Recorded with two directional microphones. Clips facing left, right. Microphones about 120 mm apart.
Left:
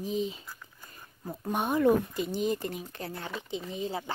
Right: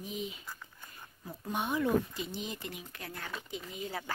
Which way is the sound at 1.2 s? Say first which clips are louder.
Left 5 dB; 45° left (ahead or behind).